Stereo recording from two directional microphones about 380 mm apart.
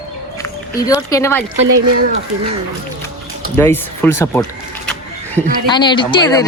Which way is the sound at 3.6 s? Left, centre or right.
Centre.